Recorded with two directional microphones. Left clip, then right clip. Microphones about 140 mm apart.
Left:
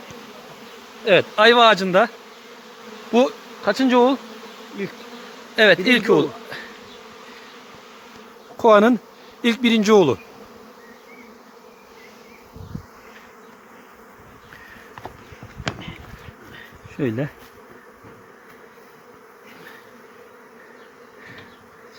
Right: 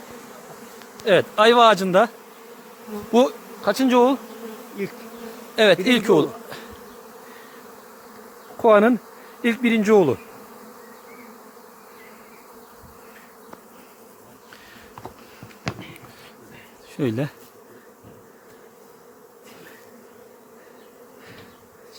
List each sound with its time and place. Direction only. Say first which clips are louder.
1.0 s speech: left 2 dB; centre (ahead or behind)
3.1 s bee: even; centre (ahead or behind)
5.5 s speech: left 2 dB; centre (ahead or behind)
8.6 s speech: left 1 dB; 20° left (ahead or behind)
17.0 s bee: even; 5° right (ahead or behind)